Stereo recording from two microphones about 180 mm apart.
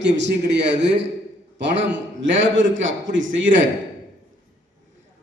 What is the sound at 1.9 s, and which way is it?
A man's voice, 90° right.